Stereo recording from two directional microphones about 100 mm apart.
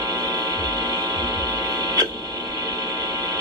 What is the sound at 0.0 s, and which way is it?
Train, 40° right (ahead or behind).